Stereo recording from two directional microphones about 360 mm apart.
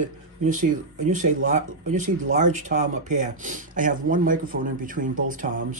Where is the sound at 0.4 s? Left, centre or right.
Right.